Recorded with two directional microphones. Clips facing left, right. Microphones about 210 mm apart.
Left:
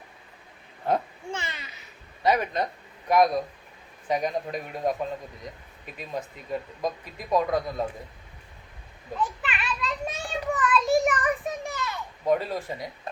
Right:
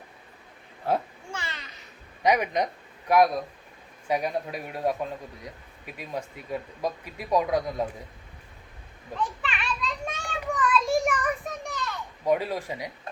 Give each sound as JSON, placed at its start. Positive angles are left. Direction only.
{"t": 0.9, "sound": "speech", "side_deg": -5}
{"t": 1.3, "sound": "a sound", "side_deg": 25}
{"t": 2.2, "sound": "speech", "side_deg": -15}
{"t": 9.4, "sound": "child singing", "side_deg": 5}
{"t": 12.2, "sound": "speech", "side_deg": -10}